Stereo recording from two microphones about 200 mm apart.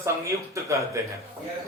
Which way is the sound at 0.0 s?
15° right (ahead or behind).